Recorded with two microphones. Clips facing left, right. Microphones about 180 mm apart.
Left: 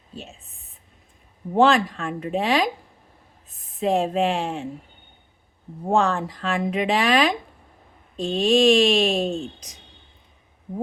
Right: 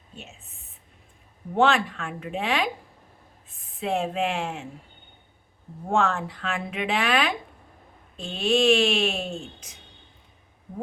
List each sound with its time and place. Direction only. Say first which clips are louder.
0.1 s speech: left 6 dB; 35° left (ahead or behind)
1.5 s speech: left 4 dB; 35° left (ahead or behind)
3.8 s speech: left 5 dB; 35° left (ahead or behind)
5.9 s speech: left 3 dB; 35° left (ahead or behind)